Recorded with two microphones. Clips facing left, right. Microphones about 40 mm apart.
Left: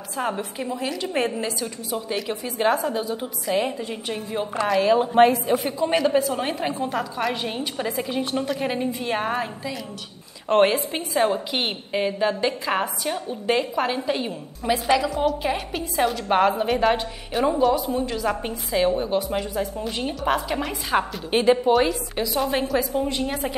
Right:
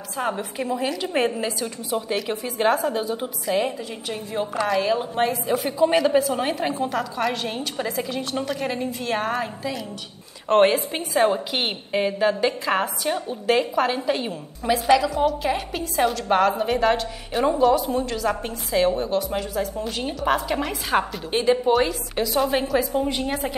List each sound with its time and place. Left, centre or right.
0.2 s a woman's voice: centre
3.5 s a woman's voice: centre
4.8 s a woman's voice: left
5.5 s a woman's voice: centre
8.1 s a woman's voice: left
10.5 s a woman's voice: centre
16.2 s a woman's voice: centre
16.6 s a woman's voice: centre
19.8 s a woman's voice: centre
21.3 s a woman's voice: centre
21.6 s a woman's voice: centre